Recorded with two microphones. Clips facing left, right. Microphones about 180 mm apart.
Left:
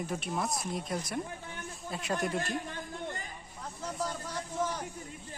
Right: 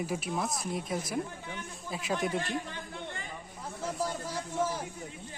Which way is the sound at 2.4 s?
45° left (ahead or behind).